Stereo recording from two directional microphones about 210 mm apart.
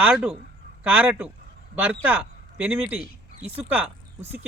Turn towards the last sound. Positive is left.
turn(degrees=-10)  # may be behind; listen again after turning